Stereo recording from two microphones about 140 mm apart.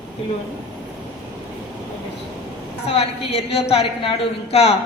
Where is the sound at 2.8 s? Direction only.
45° left (ahead or behind).